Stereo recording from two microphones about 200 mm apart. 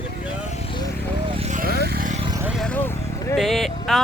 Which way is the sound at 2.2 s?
20° right (ahead or behind).